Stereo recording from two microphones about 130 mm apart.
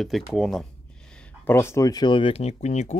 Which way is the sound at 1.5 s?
20° left (ahead or behind).